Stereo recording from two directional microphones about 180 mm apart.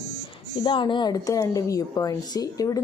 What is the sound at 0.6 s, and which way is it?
A woman's voice, 25° left (ahead or behind).